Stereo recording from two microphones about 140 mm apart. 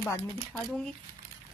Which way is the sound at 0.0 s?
20° left (ahead or behind).